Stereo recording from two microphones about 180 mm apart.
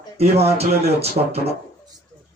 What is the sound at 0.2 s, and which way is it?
A man's voice, 35° right (ahead or behind).